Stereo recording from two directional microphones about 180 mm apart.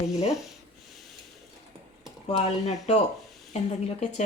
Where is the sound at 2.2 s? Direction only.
35° left (ahead or behind).